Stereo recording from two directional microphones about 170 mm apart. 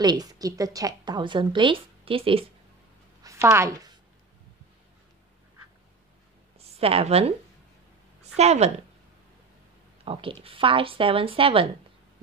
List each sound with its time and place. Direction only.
0.0 s a woman's voice: 25° right (ahead or behind)
3.3 s speech: 15° right (ahead or behind)
6.8 s speech: 35° right (ahead or behind)
8.4 s speech: 40° right (ahead or behind)
10.0 s speech: 30° right (ahead or behind)